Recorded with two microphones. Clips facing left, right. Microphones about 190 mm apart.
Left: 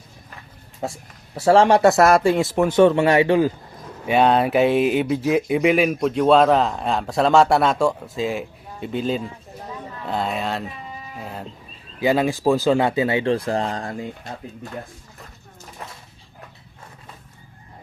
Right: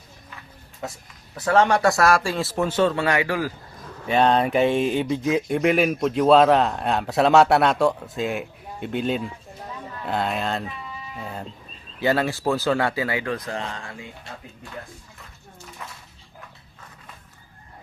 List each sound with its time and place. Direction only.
1.4 s speech: 30° left (ahead or behind)
4.0 s speech: 10° left (ahead or behind)
11.9 s speech: 15° left (ahead or behind); by 14.1 s 40° left (ahead or behind)
15.8 s a sound: 40° left (ahead or behind)